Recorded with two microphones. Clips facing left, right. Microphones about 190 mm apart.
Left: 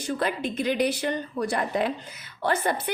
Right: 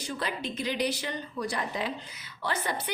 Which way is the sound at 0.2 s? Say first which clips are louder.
Left 5 dB; 55° left (ahead or behind).